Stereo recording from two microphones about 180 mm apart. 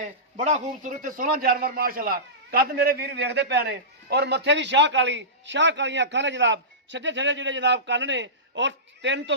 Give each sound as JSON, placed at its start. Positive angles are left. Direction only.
{"t": 0.0, "sound": "a man's voice", "side_deg": -40}